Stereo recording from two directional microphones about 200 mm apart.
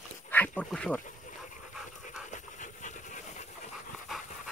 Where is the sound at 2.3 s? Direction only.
40° left (ahead or behind).